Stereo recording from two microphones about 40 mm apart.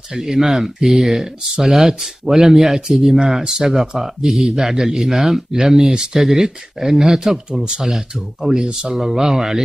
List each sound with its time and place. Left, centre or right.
0.1 s speech: centre
7.5 s speech: centre
7.8 s speech: centre